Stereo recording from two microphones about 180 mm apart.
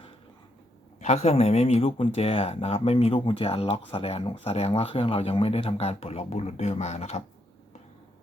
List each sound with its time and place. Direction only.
0.9 s speech: 40° left (ahead or behind)